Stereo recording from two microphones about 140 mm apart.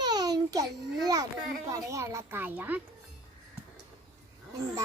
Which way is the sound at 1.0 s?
30° right (ahead or behind).